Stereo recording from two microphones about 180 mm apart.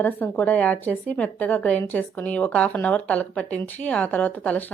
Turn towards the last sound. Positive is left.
turn(degrees=10)  # may be behind; listen again after turning